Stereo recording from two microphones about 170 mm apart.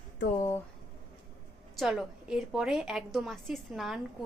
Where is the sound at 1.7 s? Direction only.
Centre (ahead or behind).